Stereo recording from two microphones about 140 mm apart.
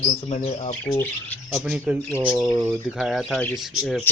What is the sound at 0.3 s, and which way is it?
Speech, 55° left (ahead or behind).